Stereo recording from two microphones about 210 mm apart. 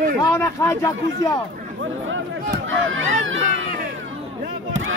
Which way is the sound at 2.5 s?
65° right (ahead or behind).